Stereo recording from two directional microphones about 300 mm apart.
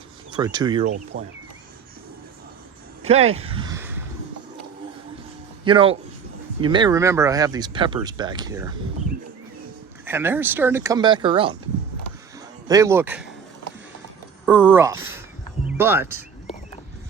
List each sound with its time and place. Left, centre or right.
0.3 s speech: centre
3.1 s speech: right
5.6 s speech: centre
10.1 s speech: centre
12.6 s speech: centre
14.4 s speech: centre
15.6 s music: centre